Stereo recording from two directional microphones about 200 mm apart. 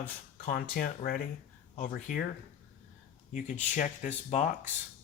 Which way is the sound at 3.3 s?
40° left (ahead or behind).